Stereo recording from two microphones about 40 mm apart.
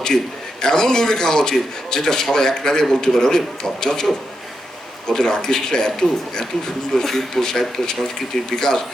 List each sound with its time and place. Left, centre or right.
0.6 s a man's voice: centre